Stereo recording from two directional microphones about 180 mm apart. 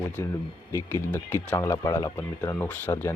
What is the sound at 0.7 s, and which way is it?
Speech, 15° left (ahead or behind).